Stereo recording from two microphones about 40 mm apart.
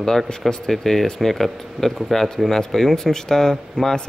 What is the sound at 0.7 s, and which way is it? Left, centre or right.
Speech, centre.